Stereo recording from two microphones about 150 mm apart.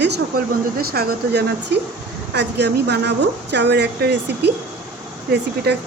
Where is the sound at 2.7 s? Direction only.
90° right.